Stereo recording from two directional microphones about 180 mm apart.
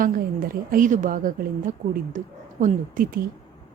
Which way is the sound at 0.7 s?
45° right (ahead or behind).